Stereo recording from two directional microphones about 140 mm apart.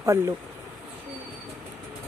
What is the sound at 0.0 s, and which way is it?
Speech, 20° right (ahead or behind).